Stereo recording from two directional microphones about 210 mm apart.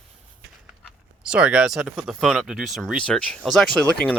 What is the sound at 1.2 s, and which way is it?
Speech, 5° right (ahead or behind).